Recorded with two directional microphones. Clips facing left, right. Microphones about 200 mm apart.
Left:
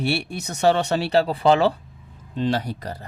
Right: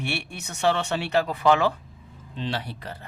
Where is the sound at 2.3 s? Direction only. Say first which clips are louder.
Left 8 dB; 45° left (ahead or behind).